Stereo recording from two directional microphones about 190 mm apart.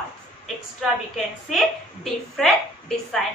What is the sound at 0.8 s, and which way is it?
A woman's voice, centre (ahead or behind).